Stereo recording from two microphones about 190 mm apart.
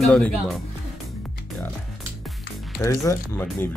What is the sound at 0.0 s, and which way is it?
Speech, 5° left (ahead or behind).